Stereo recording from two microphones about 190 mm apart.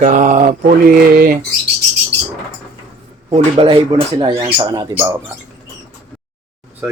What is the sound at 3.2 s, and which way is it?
Speech, 30° right (ahead or behind).